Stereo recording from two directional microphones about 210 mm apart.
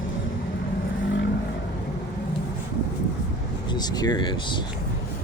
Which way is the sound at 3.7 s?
20° left (ahead or behind).